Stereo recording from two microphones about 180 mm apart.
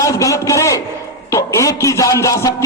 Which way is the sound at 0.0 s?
20° left (ahead or behind).